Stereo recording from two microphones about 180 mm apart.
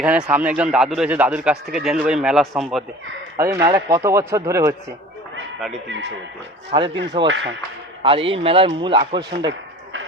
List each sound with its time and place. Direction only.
0.0 s speech: 5° right (ahead or behind)
3.3 s speech: 15° right (ahead or behind)
5.9 s speech: 75° right (ahead or behind)
6.7 s a man's voice: 25° right (ahead or behind)
7.3 s speech: 90° right
8.0 s a man's voice: 30° right (ahead or behind)